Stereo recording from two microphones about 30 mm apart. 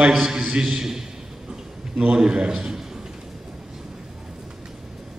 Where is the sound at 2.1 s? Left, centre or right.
Right.